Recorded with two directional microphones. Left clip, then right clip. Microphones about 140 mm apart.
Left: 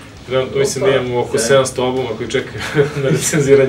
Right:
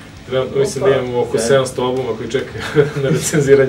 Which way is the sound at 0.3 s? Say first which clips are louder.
Left 1 dB; 10° left (ahead or behind).